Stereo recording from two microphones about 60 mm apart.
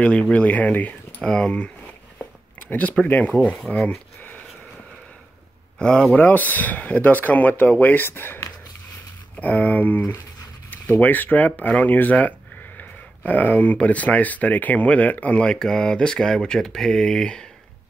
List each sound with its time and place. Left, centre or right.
0.0 s speech: left
1.2 s speech: centre
2.7 s speech: left
5.8 s speech: centre
6.1 s speech: left
9.4 s speech: left; by 17.5 s centre